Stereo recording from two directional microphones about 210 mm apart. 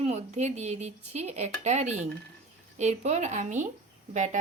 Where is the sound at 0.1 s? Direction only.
30° right (ahead or behind).